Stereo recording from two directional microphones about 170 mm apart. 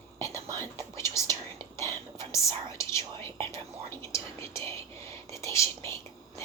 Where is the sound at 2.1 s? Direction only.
15° left (ahead or behind).